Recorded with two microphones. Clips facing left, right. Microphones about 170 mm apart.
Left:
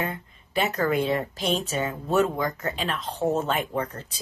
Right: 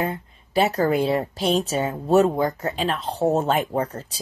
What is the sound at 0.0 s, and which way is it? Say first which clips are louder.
Speech: right 4 dB; 35° right (ahead or behind).